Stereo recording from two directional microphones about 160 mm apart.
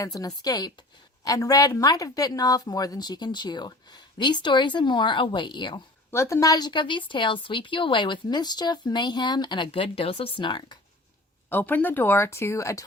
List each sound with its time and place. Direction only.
0.0 s speech: 20° left (ahead or behind)
6.1 s speech: 15° left (ahead or behind)
11.4 s speech: 10° left (ahead or behind)